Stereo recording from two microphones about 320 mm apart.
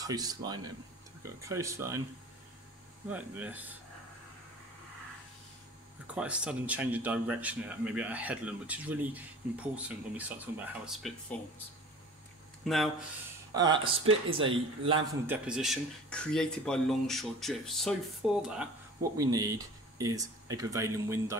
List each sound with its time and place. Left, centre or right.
0.0 s speech: centre
3.1 s a man's voice: centre
6.1 s a man's voice: centre
12.6 s a man's voice: centre
13.5 s speech: centre
14.0 s speech: right
14.5 s speech: centre
15.2 s a man's voice: centre